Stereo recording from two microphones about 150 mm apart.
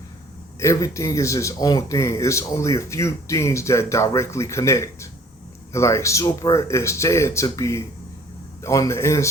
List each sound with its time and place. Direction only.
0.6 s speech: 20° left (ahead or behind)